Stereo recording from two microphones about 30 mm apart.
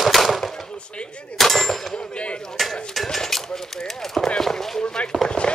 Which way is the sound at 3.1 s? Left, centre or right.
Centre.